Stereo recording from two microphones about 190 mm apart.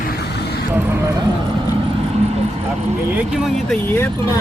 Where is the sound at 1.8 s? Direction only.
35° right (ahead or behind).